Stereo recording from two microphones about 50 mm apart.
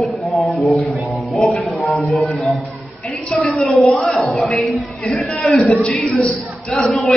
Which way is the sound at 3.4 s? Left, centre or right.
Left.